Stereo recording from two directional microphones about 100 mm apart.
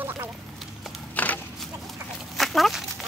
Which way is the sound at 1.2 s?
15° left (ahead or behind).